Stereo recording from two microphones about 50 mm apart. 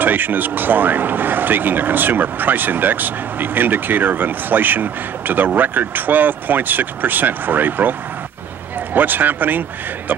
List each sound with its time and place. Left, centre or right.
0.0 s speech: right
8.9 s speech: right